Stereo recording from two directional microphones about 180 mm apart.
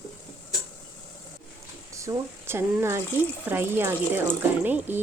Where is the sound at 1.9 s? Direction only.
15° right (ahead or behind).